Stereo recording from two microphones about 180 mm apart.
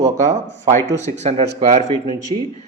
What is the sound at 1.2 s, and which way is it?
Speech, 40° right (ahead or behind).